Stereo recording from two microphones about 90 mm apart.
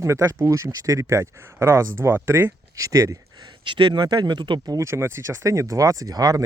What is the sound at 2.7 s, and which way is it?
Speech, 40° right (ahead or behind).